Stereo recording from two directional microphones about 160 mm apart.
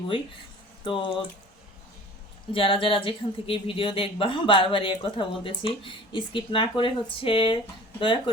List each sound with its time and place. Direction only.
0.9 s speech: 35° left (ahead or behind)
2.5 s speech: 35° left (ahead or behind)